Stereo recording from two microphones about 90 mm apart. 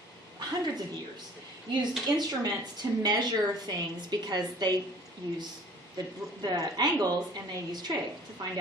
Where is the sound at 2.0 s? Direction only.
45° right (ahead or behind).